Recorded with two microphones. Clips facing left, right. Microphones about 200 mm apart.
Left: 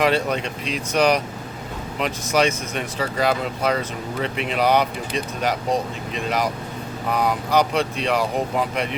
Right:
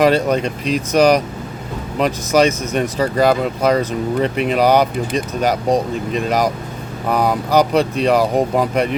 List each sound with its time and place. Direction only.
0.0 s speech: 40° right (ahead or behind)